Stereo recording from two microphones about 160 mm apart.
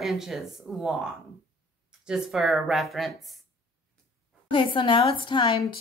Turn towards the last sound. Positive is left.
turn(degrees=30)  # may be behind; listen again after turning